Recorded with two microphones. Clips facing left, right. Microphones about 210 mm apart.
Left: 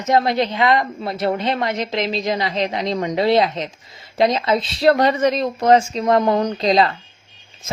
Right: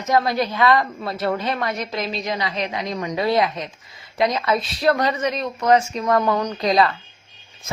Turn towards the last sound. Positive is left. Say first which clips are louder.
# left 2 dB
turn(degrees=25)  # may be behind; listen again after turning